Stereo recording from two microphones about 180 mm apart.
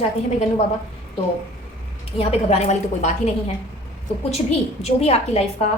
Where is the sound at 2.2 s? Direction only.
35° left (ahead or behind).